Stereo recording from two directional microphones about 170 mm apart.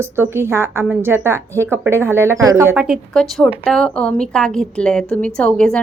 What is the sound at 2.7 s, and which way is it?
A woman's voice, 5° right (ahead or behind).